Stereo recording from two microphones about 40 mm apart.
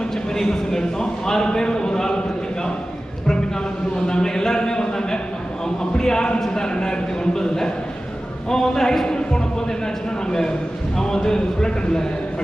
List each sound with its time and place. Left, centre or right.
0.3 s a man's voice: centre
4.0 s a man's voice: centre
10.9 s a man's voice: centre